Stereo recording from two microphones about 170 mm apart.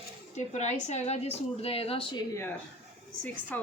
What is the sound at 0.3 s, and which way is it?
A woman's voice, 45° left (ahead or behind).